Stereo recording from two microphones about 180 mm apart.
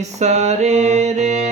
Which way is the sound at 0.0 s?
40° right (ahead or behind).